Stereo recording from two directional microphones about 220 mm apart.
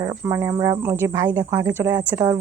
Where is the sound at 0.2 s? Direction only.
15° right (ahead or behind).